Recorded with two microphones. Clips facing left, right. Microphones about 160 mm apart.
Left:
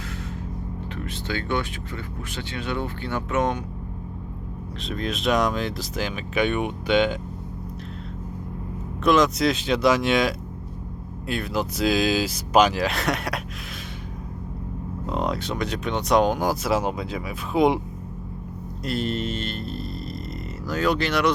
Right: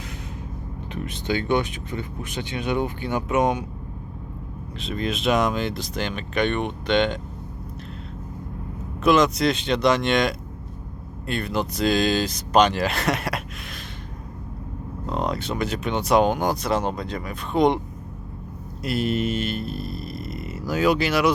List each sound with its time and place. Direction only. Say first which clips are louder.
0.9 s speech: right 5 dB; 20° right (ahead or behind)
4.8 s speech: right 2 dB; centre (ahead or behind)
9.0 s speech: right 1 dB; centre (ahead or behind)
15.0 s speech: even; centre (ahead or behind)
18.8 s a sound: right 3 dB; 10° right (ahead or behind)